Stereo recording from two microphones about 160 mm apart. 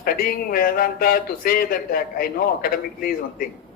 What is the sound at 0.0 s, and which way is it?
Speech, 65° left (ahead or behind).